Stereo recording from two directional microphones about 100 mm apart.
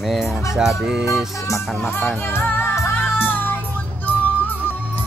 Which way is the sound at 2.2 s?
20° left (ahead or behind).